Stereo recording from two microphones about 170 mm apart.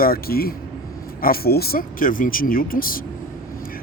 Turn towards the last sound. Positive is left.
turn(degrees=60)  # may be behind; listen again after turning